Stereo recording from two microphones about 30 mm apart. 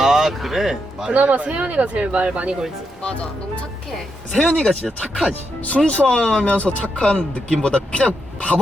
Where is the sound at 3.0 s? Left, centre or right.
Left.